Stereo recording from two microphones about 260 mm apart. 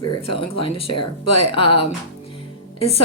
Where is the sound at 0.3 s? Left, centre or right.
Left.